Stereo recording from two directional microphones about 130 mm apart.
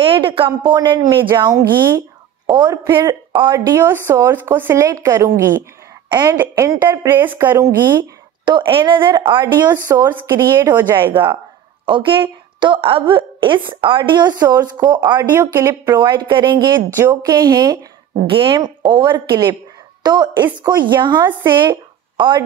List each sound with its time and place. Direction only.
0.0 s a woman's voice: 40° right (ahead or behind)
3.7 s a woman's voice: 20° right (ahead or behind)
6.0 s a woman's voice: 30° right (ahead or behind)
6.4 s speech: 20° right (ahead or behind)
8.5 s a woman's voice: 40° right (ahead or behind)
10.6 s a woman's voice: 15° right (ahead or behind)
11.8 s a woman's voice: 40° right (ahead or behind)
15.2 s a woman's voice: 20° right (ahead or behind)
18.2 s a woman's voice: 40° right (ahead or behind)
21.5 s a sound: 35° right (ahead or behind)